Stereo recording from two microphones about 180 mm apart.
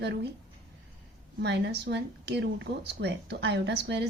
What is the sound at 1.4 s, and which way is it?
Speech, 75° right (ahead or behind).